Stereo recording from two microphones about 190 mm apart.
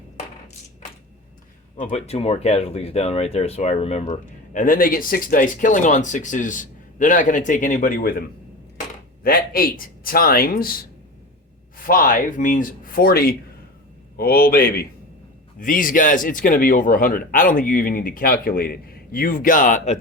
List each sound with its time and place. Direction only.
1.7 s speech: 40° left (ahead or behind)
9.2 s speech: 50° left (ahead or behind)
11.9 s speech: 45° left (ahead or behind)